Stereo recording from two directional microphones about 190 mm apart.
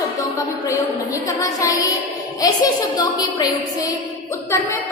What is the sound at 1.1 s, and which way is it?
A woman's voice, 20° left (ahead or behind).